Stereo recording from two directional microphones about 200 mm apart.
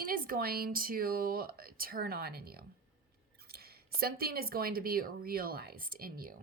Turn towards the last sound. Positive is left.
turn(degrees=-45)  # may be behind; listen again after turning